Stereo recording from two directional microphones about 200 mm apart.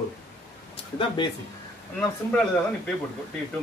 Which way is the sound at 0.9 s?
25° left (ahead or behind).